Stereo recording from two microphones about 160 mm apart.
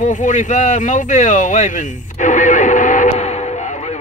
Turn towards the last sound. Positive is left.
turn(degrees=50)  # may be behind; listen again after turning